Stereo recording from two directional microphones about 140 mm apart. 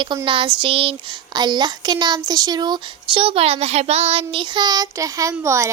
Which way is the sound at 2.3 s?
30° right (ahead or behind).